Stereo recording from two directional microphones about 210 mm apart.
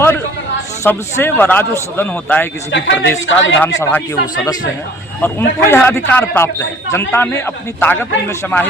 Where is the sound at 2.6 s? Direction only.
60° left (ahead or behind).